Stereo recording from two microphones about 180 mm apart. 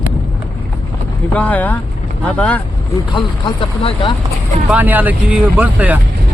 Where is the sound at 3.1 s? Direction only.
30° left (ahead or behind).